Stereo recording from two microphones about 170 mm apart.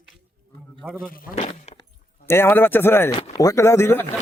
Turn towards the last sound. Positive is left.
turn(degrees=15)  # may be behind; listen again after turning